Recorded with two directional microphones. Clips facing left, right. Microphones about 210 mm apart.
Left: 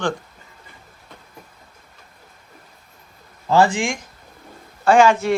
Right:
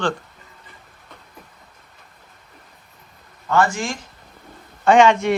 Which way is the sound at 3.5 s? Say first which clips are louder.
Left 3 dB; 30° left (ahead or behind).